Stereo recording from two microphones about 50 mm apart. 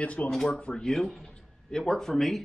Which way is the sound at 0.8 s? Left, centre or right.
Centre.